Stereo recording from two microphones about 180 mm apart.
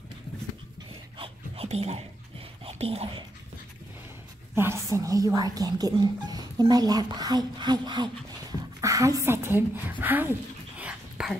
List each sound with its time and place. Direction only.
1.1 s a sound: 30° right (ahead or behind)
2.6 s speech: 35° right (ahead or behind)
4.6 s a woman's voice: 15° right (ahead or behind)
10.8 s dog: 5° right (ahead or behind)